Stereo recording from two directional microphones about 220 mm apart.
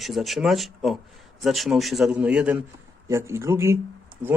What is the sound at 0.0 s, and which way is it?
A man's voice, centre (ahead or behind).